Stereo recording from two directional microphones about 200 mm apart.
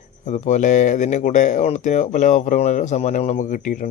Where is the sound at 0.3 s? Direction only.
35° left (ahead or behind).